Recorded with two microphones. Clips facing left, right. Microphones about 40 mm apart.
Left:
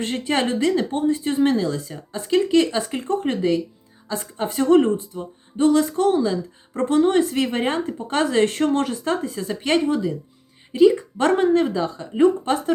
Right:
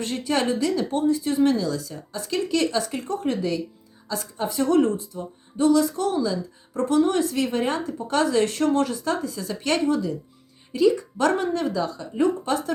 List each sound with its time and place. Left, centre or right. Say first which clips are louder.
0.0 s a woman's voice: left 2 dB; left